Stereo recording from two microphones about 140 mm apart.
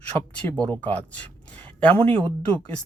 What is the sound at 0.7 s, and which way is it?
Speech, 10° left (ahead or behind).